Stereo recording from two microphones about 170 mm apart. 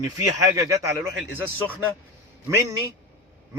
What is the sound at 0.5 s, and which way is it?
Speech, 20° right (ahead or behind).